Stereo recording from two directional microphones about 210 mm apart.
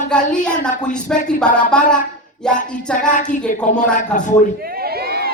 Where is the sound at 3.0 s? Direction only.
35° left (ahead or behind).